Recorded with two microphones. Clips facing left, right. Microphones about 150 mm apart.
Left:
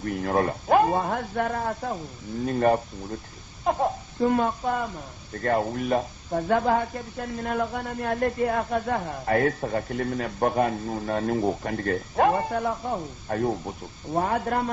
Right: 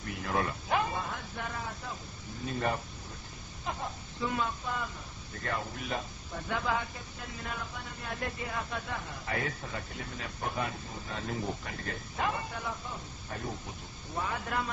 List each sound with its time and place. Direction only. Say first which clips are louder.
0.0 s speech: left 9 dB; 50° left (ahead or behind)